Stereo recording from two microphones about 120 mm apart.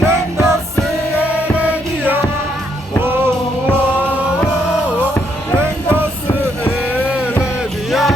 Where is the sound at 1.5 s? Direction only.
15° right (ahead or behind).